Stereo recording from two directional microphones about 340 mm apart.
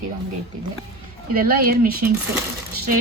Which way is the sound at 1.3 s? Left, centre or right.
Right.